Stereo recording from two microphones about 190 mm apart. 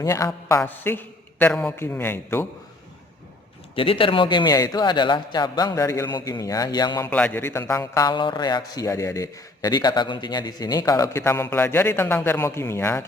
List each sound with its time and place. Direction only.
0.0 s a man's voice: 15° left (ahead or behind)
3.8 s speech: 30° left (ahead or behind)
7.1 s a man's voice: 10° left (ahead or behind)